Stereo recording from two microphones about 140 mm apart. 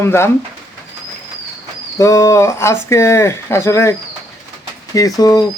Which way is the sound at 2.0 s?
20° left (ahead or behind).